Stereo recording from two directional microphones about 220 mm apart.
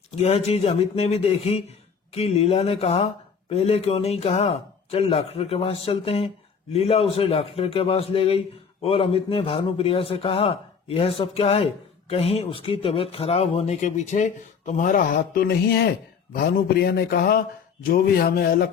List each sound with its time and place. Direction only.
0.2 s a man's voice: 30° left (ahead or behind)